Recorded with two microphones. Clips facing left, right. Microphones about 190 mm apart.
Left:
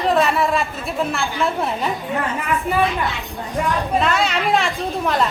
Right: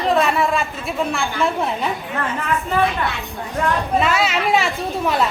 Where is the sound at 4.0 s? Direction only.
5° right (ahead or behind).